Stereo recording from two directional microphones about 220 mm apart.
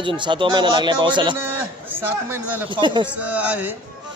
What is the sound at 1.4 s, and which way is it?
A man's voice, 10° right (ahead or behind).